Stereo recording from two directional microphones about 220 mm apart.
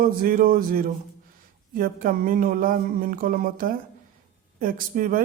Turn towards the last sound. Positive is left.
turn(degrees=-40)  # may be behind; listen again after turning